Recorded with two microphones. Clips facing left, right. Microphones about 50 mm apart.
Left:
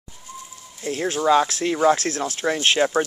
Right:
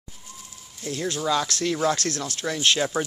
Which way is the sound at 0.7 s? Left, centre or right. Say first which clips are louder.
Left 4 dB; left.